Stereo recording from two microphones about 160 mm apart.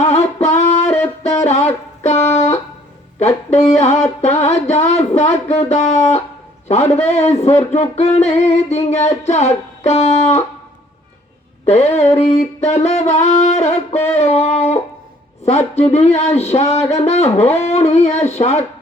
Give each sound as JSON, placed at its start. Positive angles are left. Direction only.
{"t": 0.0, "sound": "singing", "side_deg": 40}
{"t": 0.5, "sound": "music", "side_deg": 45}
{"t": 1.5, "sound": "a sound", "side_deg": 45}
{"t": 2.3, "sound": "music", "side_deg": 45}
{"t": 3.5, "sound": "speech", "side_deg": 45}
{"t": 11.6, "sound": "speech", "side_deg": 45}